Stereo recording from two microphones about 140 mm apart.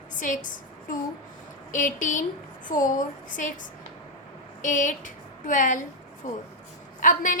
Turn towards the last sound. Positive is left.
turn(degrees=70)  # may be behind; listen again after turning